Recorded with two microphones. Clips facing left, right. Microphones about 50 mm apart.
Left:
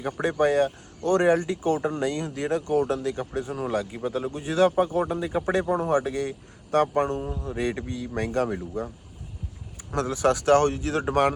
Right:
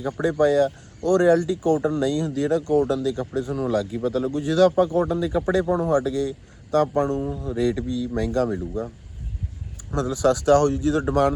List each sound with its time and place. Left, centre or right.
0.2 s speech: left
7.4 s speech: left
9.9 s speech: left